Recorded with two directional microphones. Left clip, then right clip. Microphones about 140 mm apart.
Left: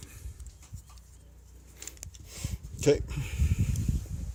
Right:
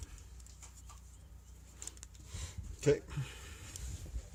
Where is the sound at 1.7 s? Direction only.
35° left (ahead or behind).